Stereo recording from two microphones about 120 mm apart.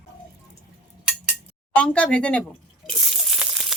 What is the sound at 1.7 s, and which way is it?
Speech, 10° left (ahead or behind).